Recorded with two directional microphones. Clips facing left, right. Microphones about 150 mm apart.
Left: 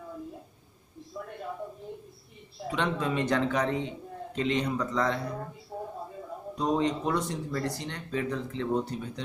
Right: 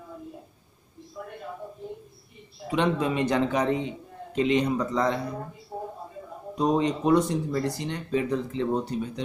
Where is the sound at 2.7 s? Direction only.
15° right (ahead or behind).